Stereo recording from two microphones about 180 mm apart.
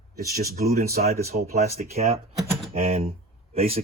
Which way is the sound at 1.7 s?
35° right (ahead or behind).